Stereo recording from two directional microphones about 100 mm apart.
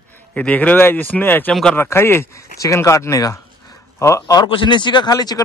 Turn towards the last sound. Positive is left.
turn(degrees=40)  # may be behind; listen again after turning